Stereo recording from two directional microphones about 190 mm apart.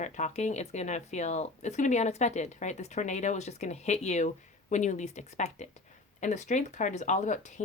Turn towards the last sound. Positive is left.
turn(degrees=40)  # may be behind; listen again after turning